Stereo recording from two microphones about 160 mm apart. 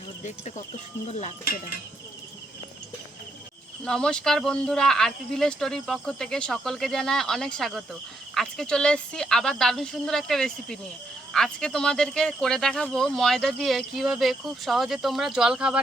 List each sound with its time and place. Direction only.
0.3 s speech: 50° left (ahead or behind)
1.5 s cricket: 65° left (ahead or behind)
3.8 s speech: 5° left (ahead or behind)